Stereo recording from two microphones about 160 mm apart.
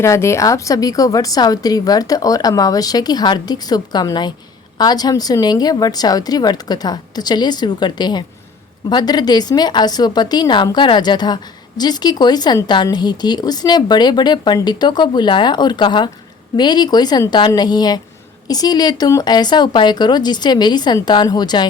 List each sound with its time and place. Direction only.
0.0 s a woman's voice: 15° left (ahead or behind)